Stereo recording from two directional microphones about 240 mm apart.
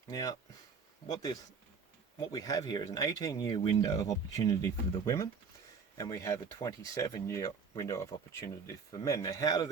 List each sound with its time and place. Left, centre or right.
0.1 s speech: centre